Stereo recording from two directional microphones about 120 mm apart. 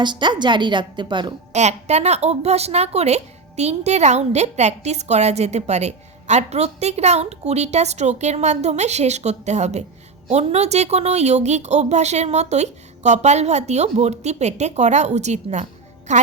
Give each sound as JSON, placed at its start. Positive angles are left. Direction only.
{"t": 0.0, "sound": "a woman's voice", "side_deg": -40}
{"t": 1.5, "sound": "a woman's voice", "side_deg": -70}